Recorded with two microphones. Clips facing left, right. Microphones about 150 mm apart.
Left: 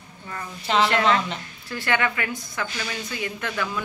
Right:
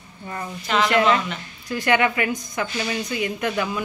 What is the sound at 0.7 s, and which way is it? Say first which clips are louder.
Speech: even; 30° left (ahead or behind).